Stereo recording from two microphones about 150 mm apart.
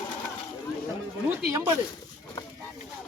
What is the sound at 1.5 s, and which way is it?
Speech, 20° right (ahead or behind).